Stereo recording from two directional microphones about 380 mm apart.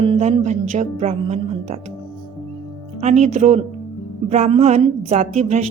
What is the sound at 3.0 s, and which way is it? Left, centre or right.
Speech, centre.